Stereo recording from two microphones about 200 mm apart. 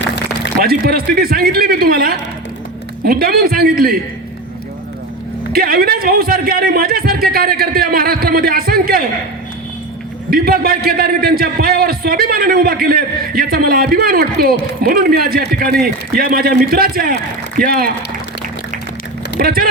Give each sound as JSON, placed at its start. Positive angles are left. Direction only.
{"t": 0.6, "sound": "a man's voice", "side_deg": -50}
{"t": 5.5, "sound": "a man's voice", "side_deg": -50}
{"t": 10.2, "sound": "a man's voice", "side_deg": -50}
{"t": 19.4, "sound": "a man's voice", "side_deg": -45}